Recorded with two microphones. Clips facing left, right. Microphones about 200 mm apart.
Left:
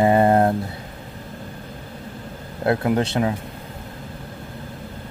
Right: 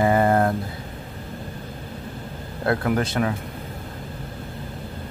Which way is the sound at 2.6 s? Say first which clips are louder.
Left 2 dB; 20° left (ahead or behind).